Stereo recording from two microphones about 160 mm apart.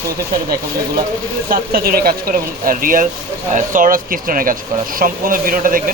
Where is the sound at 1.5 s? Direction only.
70° right (ahead or behind).